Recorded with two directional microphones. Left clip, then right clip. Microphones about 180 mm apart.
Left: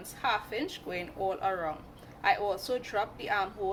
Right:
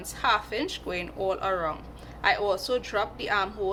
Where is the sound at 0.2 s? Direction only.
15° right (ahead or behind).